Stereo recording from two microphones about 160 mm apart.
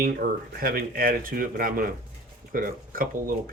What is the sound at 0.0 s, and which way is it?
Speech, 65° right (ahead or behind).